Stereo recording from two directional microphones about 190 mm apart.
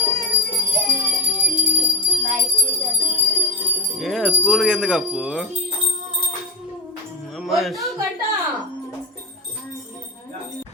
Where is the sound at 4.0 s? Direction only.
Centre (ahead or behind).